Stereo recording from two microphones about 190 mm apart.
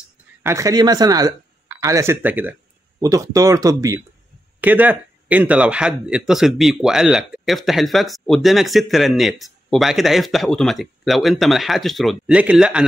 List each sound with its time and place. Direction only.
0.4 s speech: 15° right (ahead or behind)